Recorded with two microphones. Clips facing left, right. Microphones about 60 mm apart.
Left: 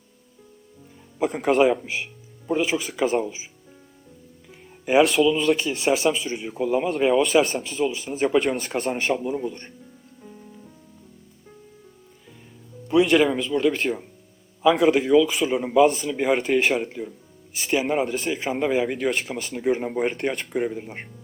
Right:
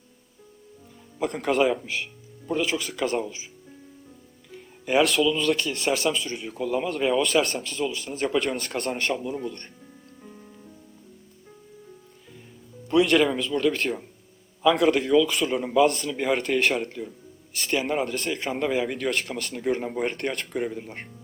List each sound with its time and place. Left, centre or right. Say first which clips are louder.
1.2 s speech: left 4 dB; centre
4.5 s speech: left 4 dB; centre
6.3 s speech: left 3 dB; centre
6.6 s speech: left 4 dB; centre
6.9 s speech: left 4 dB; centre
12.9 s speech: left 2 dB; centre